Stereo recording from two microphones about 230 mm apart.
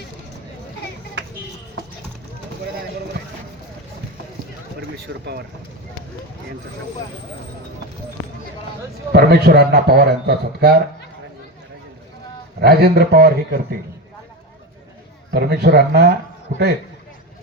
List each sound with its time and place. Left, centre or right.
4.8 s a sound: right
9.1 s a man's voice: right
12.5 s a man's voice: right
15.3 s a man's voice: right